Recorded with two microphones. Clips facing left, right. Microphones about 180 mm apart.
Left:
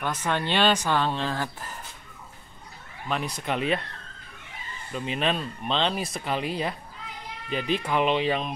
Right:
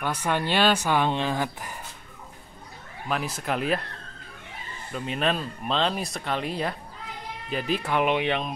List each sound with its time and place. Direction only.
0.0 s speech: 10° right (ahead or behind)
3.1 s speech: 5° right (ahead or behind)
4.9 s speech: centre (ahead or behind)